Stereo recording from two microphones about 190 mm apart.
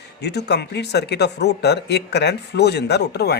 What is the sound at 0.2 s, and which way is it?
Speech, 60° left (ahead or behind).